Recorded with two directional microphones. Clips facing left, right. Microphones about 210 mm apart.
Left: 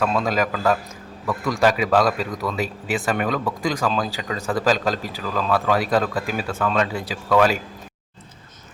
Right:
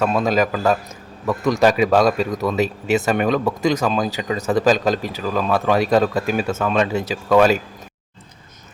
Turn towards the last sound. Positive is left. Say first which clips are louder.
# right 4 dB
turn(degrees=-25)  # may be behind; listen again after turning